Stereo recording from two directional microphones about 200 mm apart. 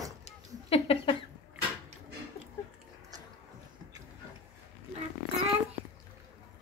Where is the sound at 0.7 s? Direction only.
30° left (ahead or behind).